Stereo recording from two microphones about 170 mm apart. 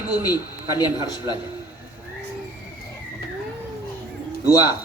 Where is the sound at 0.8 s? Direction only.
25° left (ahead or behind).